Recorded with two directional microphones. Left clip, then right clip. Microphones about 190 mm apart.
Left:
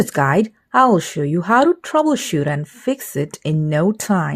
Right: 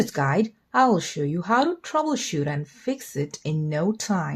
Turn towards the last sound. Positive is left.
turn(degrees=40)  # may be behind; listen again after turning